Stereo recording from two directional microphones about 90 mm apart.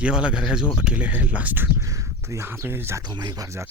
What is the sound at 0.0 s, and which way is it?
Speech, 10° right (ahead or behind).